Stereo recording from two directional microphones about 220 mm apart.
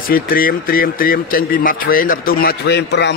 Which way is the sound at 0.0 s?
40° left (ahead or behind).